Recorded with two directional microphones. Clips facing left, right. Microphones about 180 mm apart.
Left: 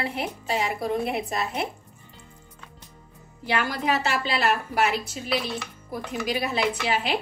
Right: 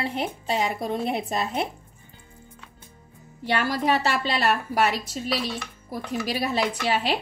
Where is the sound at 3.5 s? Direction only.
35° right (ahead or behind).